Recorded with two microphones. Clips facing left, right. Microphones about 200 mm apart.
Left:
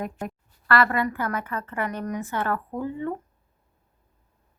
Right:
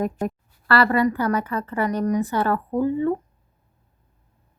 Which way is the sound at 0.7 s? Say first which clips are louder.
Right 4 dB; 35° right (ahead or behind).